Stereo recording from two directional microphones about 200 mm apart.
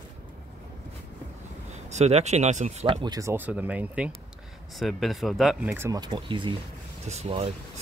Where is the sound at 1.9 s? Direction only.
35° right (ahead or behind).